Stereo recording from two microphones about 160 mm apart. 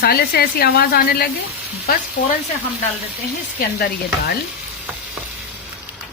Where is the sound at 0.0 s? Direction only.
70° left (ahead or behind).